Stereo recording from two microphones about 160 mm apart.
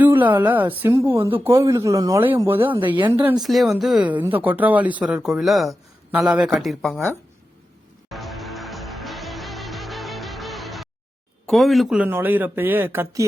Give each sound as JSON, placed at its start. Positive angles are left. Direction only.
{"t": 0.0, "sound": "speech", "side_deg": -10}
{"t": 3.4, "sound": "speech", "side_deg": 0}
{"t": 8.1, "sound": "music", "side_deg": 0}
{"t": 11.4, "sound": "speech", "side_deg": 0}